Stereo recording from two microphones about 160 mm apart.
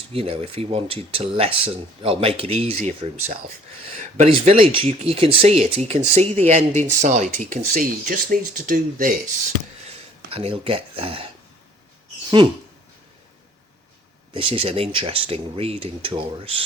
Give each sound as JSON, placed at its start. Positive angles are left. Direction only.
{"t": 0.1, "sound": "speech", "side_deg": -35}
{"t": 7.5, "sound": "speech", "side_deg": -60}
{"t": 10.3, "sound": "speech", "side_deg": -35}
{"t": 12.4, "sound": "a sound", "side_deg": -25}
{"t": 14.3, "sound": "speech", "side_deg": -35}